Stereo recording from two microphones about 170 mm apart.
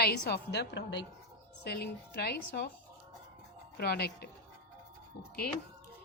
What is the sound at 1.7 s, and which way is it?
Speech, 70° left (ahead or behind).